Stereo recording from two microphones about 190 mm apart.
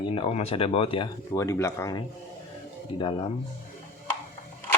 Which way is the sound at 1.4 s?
15° left (ahead or behind).